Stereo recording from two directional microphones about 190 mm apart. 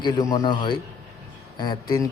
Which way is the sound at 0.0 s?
20° left (ahead or behind).